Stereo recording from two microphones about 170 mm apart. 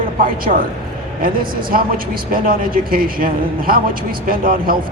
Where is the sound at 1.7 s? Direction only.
55° right (ahead or behind).